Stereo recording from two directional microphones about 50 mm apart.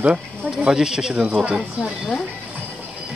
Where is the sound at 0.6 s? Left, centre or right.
Centre.